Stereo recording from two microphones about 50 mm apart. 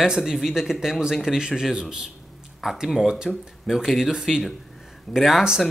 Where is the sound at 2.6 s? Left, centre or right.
Centre.